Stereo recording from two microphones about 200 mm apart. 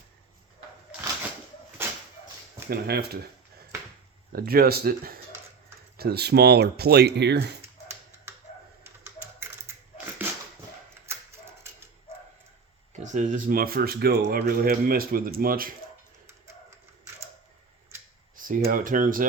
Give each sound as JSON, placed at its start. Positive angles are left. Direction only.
{"t": 1.8, "sound": "a sound", "side_deg": -10}
{"t": 2.6, "sound": "speech", "side_deg": -50}
{"t": 4.3, "sound": "speech", "side_deg": -50}
{"t": 11.0, "sound": "mechanisms", "side_deg": -15}
{"t": 13.0, "sound": "speech", "side_deg": -35}
{"t": 18.3, "sound": "speech", "side_deg": -40}